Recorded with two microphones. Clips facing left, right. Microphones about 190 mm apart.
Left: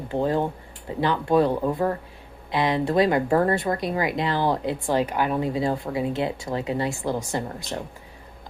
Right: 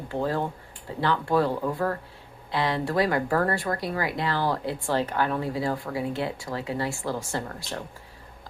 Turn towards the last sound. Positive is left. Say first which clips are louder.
# left 3 dB
turn(degrees=20)  # may be behind; listen again after turning